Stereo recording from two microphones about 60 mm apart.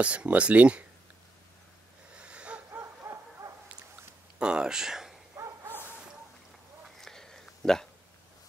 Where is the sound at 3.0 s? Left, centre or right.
Right.